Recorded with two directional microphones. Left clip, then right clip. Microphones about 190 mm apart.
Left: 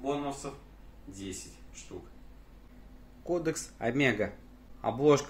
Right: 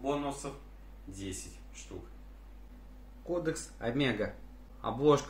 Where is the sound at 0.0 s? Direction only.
Centre (ahead or behind).